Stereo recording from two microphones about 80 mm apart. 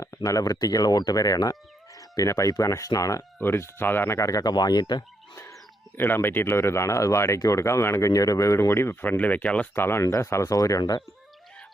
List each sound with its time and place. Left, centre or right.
0.0 s speech: left
3.3 s speech: left
4.2 s speech: left
6.0 s speech: left
9.7 s speech: left